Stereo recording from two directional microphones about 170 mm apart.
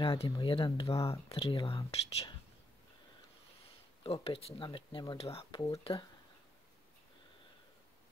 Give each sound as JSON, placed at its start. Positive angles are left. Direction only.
{"t": 0.0, "sound": "speech", "side_deg": 30}
{"t": 4.0, "sound": "speech", "side_deg": 35}